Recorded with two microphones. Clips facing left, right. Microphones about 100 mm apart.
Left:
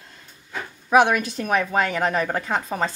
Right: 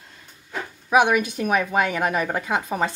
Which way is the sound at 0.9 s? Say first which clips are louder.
Left 1 dB; 10° right (ahead or behind).